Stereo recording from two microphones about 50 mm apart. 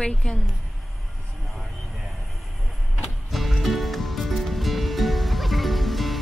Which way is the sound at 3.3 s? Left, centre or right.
Centre.